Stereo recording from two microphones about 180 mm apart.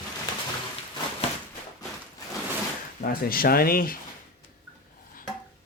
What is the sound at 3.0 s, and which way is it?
Speech, 55° left (ahead or behind).